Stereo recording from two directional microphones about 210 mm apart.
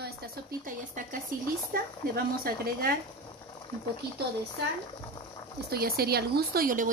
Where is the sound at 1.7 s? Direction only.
45° right (ahead or behind).